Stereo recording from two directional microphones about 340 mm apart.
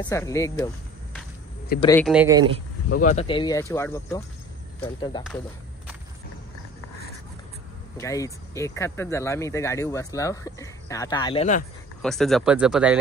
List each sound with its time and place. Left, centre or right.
0.0 s speech: centre
1.9 s speech: centre
2.9 s speech: left
8.0 s speech: centre
12.0 s speech: centre